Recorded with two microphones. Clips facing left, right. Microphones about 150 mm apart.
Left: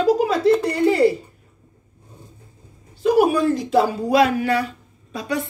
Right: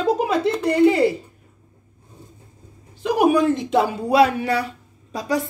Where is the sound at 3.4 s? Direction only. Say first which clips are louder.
Even; 20° right (ahead or behind).